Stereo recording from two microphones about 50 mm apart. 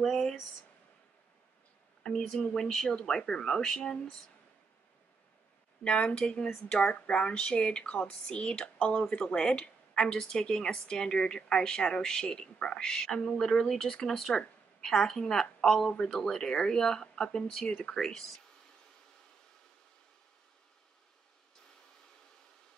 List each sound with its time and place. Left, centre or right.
0.0 s a woman's voice: centre
2.0 s a woman's voice: centre
5.9 s a woman's voice: centre